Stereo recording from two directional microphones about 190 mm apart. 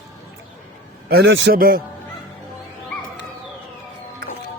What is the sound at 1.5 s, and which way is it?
Speech, 50° right (ahead or behind).